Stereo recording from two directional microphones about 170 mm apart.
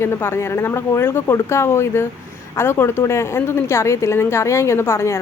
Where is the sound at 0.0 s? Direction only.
15° left (ahead or behind).